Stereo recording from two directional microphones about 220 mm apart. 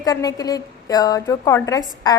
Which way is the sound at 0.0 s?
15° left (ahead or behind).